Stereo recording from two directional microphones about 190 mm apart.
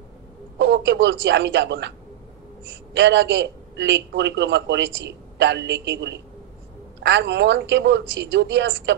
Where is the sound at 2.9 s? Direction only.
70° right (ahead or behind).